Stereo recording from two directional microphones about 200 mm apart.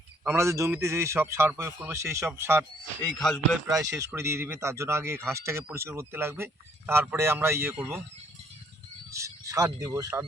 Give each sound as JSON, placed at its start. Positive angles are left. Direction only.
{"t": 0.3, "sound": "speech", "side_deg": -15}
{"t": 3.0, "sound": "speech", "side_deg": 0}
{"t": 3.7, "sound": "speech", "side_deg": -15}
{"t": 9.1, "sound": "speech", "side_deg": -15}